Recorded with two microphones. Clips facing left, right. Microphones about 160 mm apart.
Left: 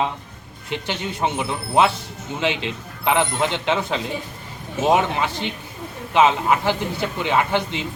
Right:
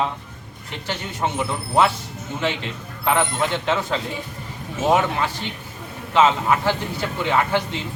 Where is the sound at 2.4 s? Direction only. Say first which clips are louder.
Left 2 dB; 15° left (ahead or behind).